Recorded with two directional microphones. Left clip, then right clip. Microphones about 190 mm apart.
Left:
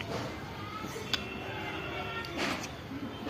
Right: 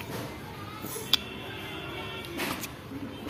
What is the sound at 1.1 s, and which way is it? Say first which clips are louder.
Tick-tock: right 8 dB; 50° right (ahead or behind).